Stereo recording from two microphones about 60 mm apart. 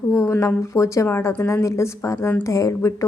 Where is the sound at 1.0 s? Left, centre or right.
Left.